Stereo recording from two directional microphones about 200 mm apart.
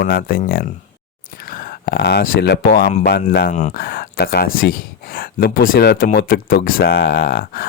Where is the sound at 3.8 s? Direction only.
50° left (ahead or behind).